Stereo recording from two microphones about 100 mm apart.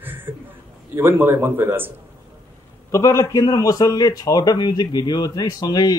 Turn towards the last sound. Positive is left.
turn(degrees=40)  # may be behind; listen again after turning